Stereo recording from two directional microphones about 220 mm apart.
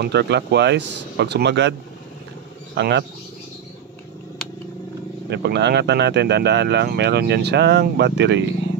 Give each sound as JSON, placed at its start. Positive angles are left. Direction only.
{"t": 0.0, "sound": "speech", "side_deg": -50}
{"t": 5.3, "sound": "speech", "side_deg": -50}